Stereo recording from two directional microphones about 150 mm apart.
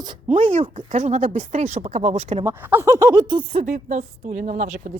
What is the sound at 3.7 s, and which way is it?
Speech, 50° right (ahead or behind).